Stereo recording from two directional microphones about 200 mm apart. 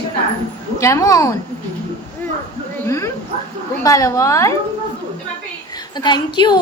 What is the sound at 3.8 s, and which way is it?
Speech, 15° left (ahead or behind).